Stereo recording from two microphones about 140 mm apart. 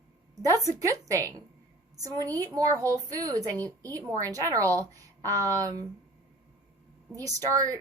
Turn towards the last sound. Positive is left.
turn(degrees=-25)  # may be behind; listen again after turning